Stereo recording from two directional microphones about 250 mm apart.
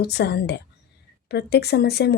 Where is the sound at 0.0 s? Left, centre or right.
Left.